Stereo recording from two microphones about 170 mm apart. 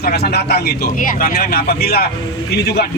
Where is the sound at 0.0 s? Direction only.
70° left (ahead or behind).